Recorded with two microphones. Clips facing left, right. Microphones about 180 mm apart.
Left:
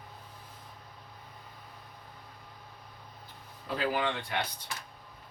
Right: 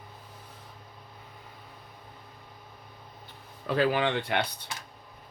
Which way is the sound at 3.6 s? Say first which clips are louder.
Right 5 dB; 70° right (ahead or behind).